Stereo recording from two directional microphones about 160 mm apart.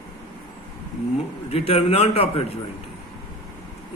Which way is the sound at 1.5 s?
40° left (ahead or behind).